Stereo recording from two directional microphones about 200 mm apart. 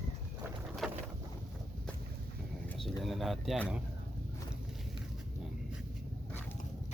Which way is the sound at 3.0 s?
Centre (ahead or behind).